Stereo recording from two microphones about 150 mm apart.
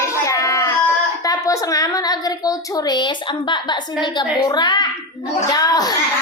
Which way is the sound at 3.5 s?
30° left (ahead or behind).